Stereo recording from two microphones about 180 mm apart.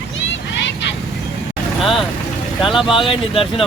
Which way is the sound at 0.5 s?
85° left.